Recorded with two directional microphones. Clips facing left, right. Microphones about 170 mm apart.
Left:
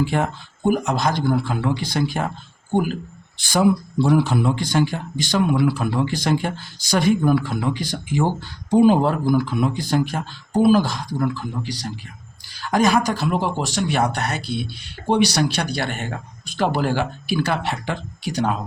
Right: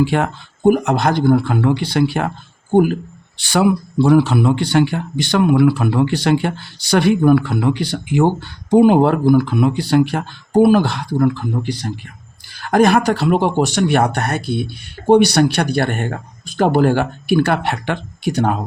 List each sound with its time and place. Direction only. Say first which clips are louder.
0.0 s speech: right 5 dB; 75° right (ahead or behind)
2.7 s speech: right 8 dB; 55° right (ahead or behind)